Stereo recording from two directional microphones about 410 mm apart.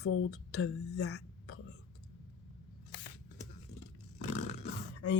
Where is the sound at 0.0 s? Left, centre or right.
Left.